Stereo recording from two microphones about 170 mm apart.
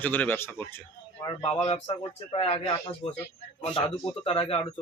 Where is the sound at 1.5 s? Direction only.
35° left (ahead or behind).